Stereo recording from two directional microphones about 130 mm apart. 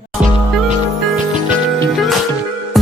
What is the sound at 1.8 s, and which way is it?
Music, centre (ahead or behind).